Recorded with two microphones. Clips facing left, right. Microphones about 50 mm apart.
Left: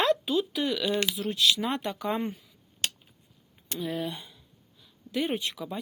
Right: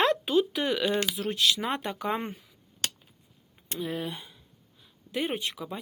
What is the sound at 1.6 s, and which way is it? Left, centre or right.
Speech, right.